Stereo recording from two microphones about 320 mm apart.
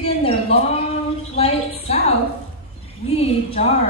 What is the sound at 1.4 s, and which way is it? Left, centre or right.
A woman's voice, centre.